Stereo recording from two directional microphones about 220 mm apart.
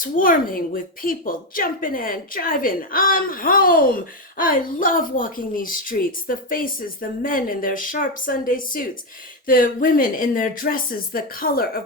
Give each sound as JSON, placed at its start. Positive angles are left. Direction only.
{"t": 0.0, "sound": "a woman's voice", "side_deg": 40}